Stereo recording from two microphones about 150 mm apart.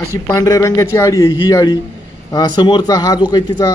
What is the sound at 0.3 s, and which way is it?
Speech, 20° left (ahead or behind).